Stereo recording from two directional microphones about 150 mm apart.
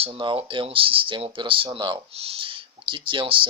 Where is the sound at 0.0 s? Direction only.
35° right (ahead or behind).